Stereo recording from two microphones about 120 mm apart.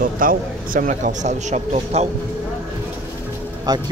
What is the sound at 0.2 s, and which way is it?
Speech, 90° right.